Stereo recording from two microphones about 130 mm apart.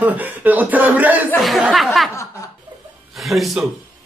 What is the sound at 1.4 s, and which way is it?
Speech, centre (ahead or behind).